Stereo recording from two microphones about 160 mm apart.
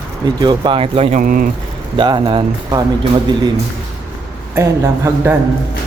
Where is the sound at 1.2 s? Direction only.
60° right (ahead or behind).